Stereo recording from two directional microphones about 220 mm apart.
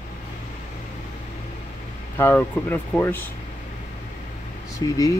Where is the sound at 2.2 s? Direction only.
10° left (ahead or behind).